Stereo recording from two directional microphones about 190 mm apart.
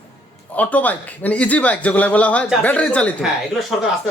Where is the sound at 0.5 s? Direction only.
10° left (ahead or behind).